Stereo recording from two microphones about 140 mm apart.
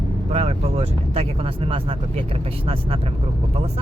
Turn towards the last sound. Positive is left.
turn(degrees=-40)  # may be behind; listen again after turning